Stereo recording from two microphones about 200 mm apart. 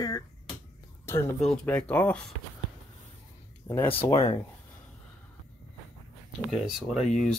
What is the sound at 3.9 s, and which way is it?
Speech, 25° left (ahead or behind).